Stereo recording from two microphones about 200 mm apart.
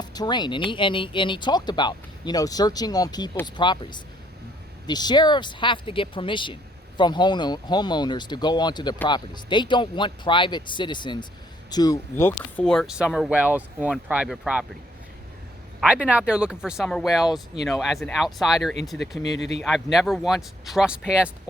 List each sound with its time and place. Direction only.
0.0 s speech: 20° left (ahead or behind); by 14.7 s 5° right (ahead or behind)
15.8 s speech: 5° right (ahead or behind)
18.9 s speech: 10° left (ahead or behind)
19.4 s speech: 60° left (ahead or behind)
19.6 s speech: centre (ahead or behind)